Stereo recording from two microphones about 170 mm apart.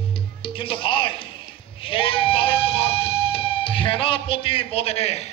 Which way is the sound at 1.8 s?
30° left (ahead or behind).